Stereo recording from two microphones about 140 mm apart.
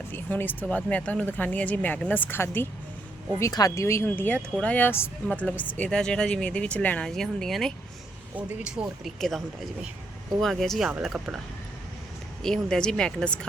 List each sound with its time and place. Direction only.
0.1 s speech: 15° left (ahead or behind)
8.4 s speech: 10° right (ahead or behind)
10.4 s speech: centre (ahead or behind)
12.4 s speech: 5° left (ahead or behind)